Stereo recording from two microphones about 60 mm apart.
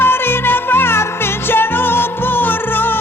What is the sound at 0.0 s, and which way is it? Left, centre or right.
Music, left.